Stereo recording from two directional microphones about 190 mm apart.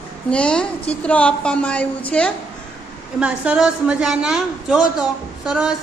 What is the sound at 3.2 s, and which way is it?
A woman's voice, 5° right (ahead or behind).